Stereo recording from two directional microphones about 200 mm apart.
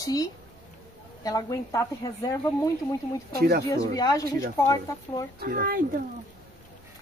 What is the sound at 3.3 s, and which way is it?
Speech, 50° right (ahead or behind).